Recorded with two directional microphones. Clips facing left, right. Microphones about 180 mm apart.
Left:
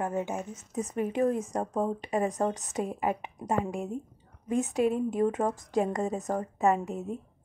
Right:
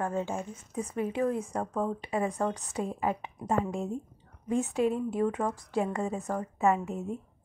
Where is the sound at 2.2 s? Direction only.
40° left (ahead or behind).